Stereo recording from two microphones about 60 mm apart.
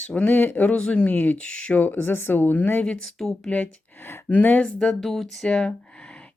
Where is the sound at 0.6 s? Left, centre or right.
Centre.